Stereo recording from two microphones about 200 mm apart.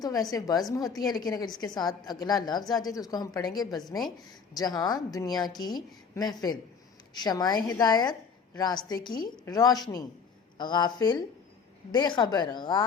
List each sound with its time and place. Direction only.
0.0 s a woman's voice: 20° left (ahead or behind)